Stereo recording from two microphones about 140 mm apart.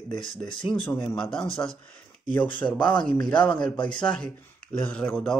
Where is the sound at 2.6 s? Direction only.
35° left (ahead or behind).